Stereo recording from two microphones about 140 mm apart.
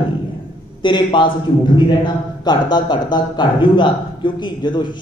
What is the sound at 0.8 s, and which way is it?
A man's voice, 35° left (ahead or behind).